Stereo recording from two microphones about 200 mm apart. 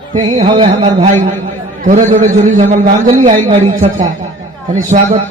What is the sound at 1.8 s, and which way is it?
A man's voice, 40° right (ahead or behind).